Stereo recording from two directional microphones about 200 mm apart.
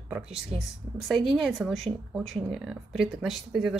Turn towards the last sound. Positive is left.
turn(degrees=0)  # may be behind; listen again after turning